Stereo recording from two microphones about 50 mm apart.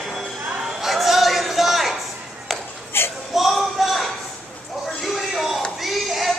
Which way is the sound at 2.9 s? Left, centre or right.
Left.